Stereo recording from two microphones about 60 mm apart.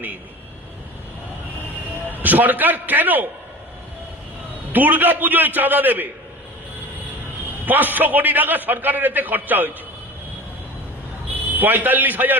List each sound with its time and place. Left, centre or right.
2.1 s a man's voice: right
4.7 s a man's voice: right
7.6 s a man's voice: right
11.5 s a man's voice: right